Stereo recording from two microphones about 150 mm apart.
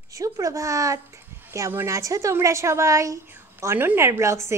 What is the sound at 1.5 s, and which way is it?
A woman's voice, 15° right (ahead or behind).